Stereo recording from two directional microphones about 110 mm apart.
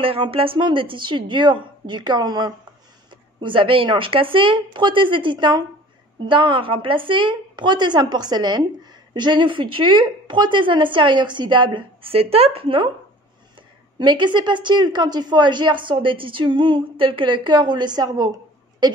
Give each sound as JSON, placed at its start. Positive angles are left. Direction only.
{"t": 0.0, "sound": "a woman's voice", "side_deg": -55}
{"t": 3.1, "sound": "a sound", "side_deg": -45}
{"t": 4.0, "sound": "a woman's voice", "side_deg": -55}
{"t": 13.9, "sound": "a woman's voice", "side_deg": -45}